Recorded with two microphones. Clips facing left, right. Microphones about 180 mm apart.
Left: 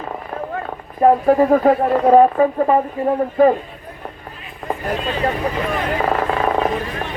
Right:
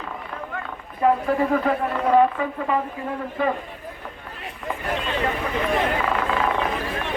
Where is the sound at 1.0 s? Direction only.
40° left (ahead or behind).